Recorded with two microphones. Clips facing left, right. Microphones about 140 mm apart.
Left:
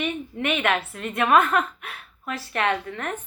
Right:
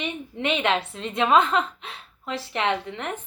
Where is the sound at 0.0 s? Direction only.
20° right (ahead or behind).